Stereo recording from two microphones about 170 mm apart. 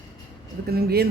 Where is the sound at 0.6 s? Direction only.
65° right (ahead or behind).